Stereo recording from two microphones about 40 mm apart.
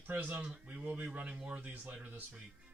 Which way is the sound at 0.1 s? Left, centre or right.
Right.